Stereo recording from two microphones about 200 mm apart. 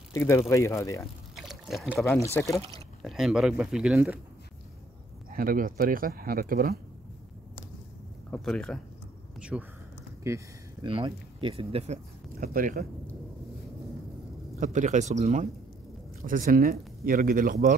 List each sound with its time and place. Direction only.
0.1 s speech: 15° left (ahead or behind)
1.3 s pour: centre (ahead or behind)
2.1 s speech: 15° left (ahead or behind)
3.0 s speech: centre (ahead or behind)
5.3 s speech: 45° right (ahead or behind)
8.3 s speech: 5° left (ahead or behind); by 12.8 s 45° right (ahead or behind)
14.6 s speech: 40° right (ahead or behind)